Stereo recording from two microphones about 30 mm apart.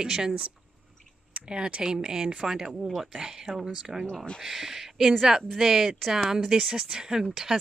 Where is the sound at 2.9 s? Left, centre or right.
Centre.